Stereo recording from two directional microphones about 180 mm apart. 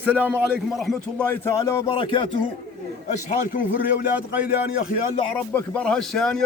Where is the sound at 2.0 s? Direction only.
30° left (ahead or behind).